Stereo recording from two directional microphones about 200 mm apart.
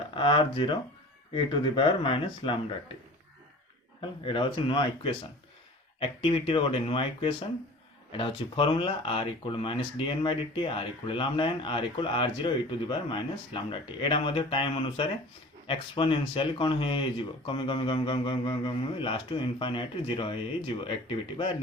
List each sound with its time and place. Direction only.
0.2 s speech: 25° left (ahead or behind)
4.0 s speech: 25° left (ahead or behind)